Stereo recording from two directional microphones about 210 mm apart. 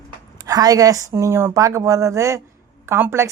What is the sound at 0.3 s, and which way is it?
A woman's voice, 15° right (ahead or behind).